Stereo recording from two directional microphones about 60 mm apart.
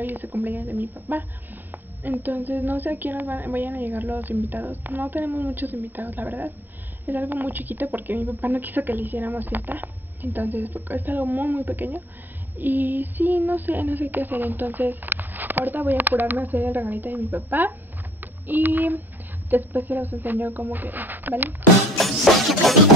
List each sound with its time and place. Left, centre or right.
0.0 s speech: right
18.2 s a sound: right
19.5 s speech: right
21.9 s music: centre